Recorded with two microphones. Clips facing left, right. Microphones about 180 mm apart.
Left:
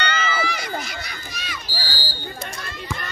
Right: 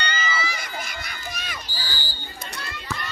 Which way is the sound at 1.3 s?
50° right (ahead or behind).